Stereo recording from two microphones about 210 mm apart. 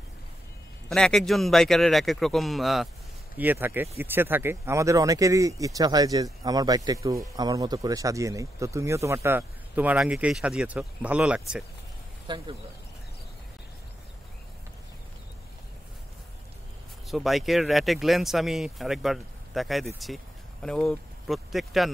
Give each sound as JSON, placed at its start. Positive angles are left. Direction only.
{"t": 0.8, "sound": "speech", "side_deg": 0}
{"t": 12.3, "sound": "speech", "side_deg": -20}
{"t": 17.1, "sound": "speech", "side_deg": 0}